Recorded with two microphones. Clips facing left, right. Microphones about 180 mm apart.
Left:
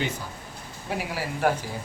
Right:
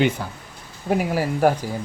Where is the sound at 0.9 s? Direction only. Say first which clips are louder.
Right 9 dB; 45° right (ahead or behind).